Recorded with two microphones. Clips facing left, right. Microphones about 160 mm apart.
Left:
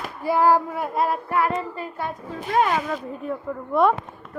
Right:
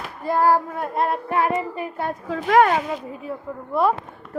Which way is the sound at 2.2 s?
90° right.